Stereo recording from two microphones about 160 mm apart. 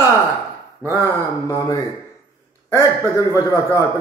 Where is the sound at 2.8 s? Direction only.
20° left (ahead or behind).